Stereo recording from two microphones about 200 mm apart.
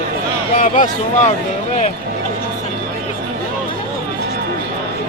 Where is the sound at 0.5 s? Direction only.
40° left (ahead or behind).